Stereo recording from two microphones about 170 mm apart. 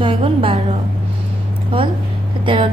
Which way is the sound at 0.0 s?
30° right (ahead or behind).